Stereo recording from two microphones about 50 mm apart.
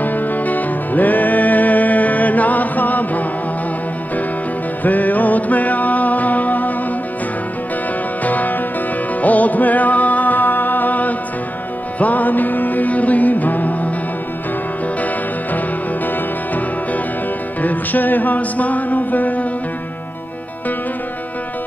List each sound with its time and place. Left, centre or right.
0.0 s music: left
4.8 s music: left
8.2 s music: left
17.6 s music: left